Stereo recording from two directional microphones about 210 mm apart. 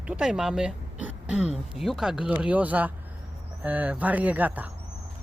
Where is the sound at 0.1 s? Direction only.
5° right (ahead or behind).